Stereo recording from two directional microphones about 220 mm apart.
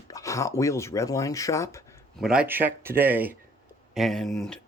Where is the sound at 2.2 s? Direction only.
5° right (ahead or behind).